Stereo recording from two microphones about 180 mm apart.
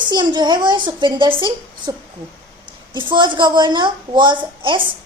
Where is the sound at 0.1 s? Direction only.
25° right (ahead or behind).